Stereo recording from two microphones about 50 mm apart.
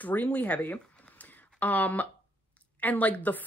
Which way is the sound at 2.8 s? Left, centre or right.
Left.